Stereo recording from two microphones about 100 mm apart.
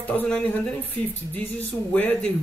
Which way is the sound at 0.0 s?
15° left (ahead or behind).